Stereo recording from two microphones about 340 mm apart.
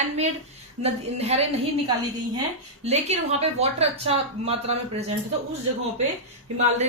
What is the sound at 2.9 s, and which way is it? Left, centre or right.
A woman's voice, centre.